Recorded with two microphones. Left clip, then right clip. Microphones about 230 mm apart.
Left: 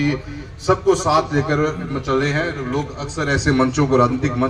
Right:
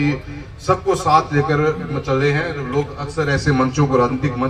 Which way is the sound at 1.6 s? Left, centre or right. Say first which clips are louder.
Right 2 dB; left.